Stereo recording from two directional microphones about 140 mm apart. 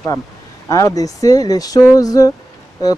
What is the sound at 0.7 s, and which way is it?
Speech, 25° left (ahead or behind).